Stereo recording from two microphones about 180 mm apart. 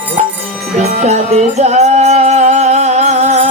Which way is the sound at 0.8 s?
35° right (ahead or behind).